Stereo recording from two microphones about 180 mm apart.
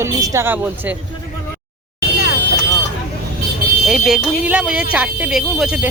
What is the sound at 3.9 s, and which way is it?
Speech, centre (ahead or behind).